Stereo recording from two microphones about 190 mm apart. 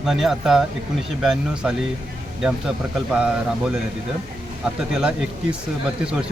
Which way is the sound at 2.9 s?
5° right (ahead or behind).